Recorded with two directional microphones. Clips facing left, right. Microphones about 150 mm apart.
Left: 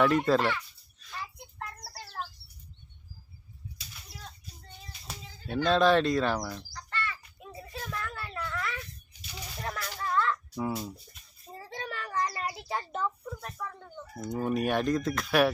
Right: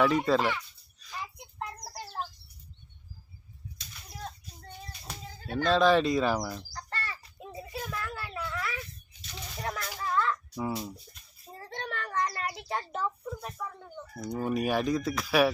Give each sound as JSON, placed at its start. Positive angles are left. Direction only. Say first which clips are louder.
{"t": 0.0, "sound": "speech", "louder": "left 1 dB", "side_deg": 0}
{"t": 1.1, "sound": "child singing", "louder": "right 1 dB", "side_deg": -15}
{"t": 4.1, "sound": "a sound", "louder": "right 7 dB", "side_deg": -45}
{"t": 5.6, "sound": "speech", "louder": "even", "side_deg": 0}
{"t": 6.7, "sound": "bird", "louder": "left 2 dB", "side_deg": -40}
{"t": 7.7, "sound": "a sound", "louder": "right 1 dB", "side_deg": -5}
{"t": 14.2, "sound": "speech", "louder": "left 1 dB", "side_deg": 0}